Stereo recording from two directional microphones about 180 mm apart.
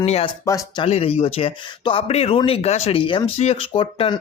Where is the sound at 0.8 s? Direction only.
30° left (ahead or behind).